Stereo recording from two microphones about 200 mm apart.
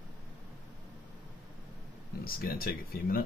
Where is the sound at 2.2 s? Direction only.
50° left (ahead or behind).